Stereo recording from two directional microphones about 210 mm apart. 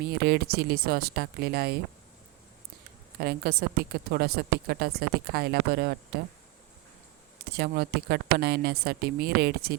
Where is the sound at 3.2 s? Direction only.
50° right (ahead or behind).